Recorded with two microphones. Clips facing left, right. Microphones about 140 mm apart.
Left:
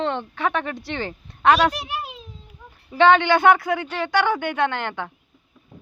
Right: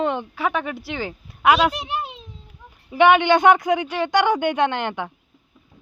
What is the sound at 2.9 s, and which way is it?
Speech, 15° right (ahead or behind).